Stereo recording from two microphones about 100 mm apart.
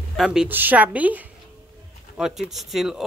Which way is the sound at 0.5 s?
15° right (ahead or behind).